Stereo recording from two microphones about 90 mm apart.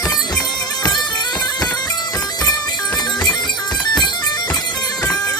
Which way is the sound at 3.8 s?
55° left (ahead or behind).